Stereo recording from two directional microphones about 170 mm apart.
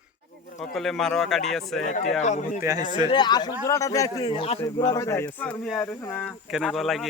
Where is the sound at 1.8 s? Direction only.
50° left (ahead or behind).